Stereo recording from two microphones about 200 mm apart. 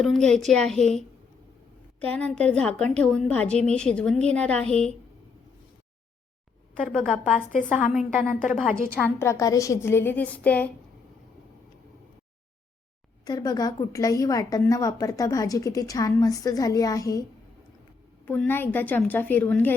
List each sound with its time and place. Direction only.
0.0 s a woman's voice: centre (ahead or behind)
2.1 s a woman's voice: 5° left (ahead or behind)
6.8 s a woman's voice: centre (ahead or behind)
9.0 s a woman's voice: 10° left (ahead or behind)
13.2 s a woman's voice: 20° left (ahead or behind)
18.3 s a woman's voice: 10° left (ahead or behind)